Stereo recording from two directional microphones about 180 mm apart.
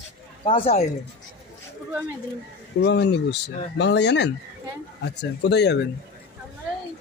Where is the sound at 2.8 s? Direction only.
70° left (ahead or behind).